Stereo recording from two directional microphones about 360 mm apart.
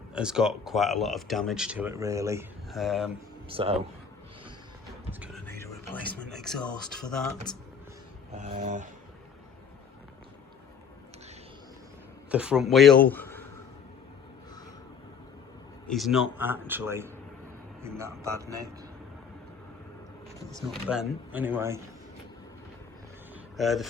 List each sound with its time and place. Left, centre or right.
0.1 s speech: centre
3.5 s speech: centre
5.2 s music: centre
6.1 s speech: centre
8.4 s speech: centre
12.3 s speech: centre
13.1 s a sound: centre
15.9 s speech: centre
20.5 s speech: centre
23.6 s speech: centre